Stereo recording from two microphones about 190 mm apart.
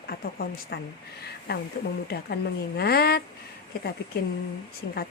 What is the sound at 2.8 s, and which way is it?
Speech, 55° left (ahead or behind).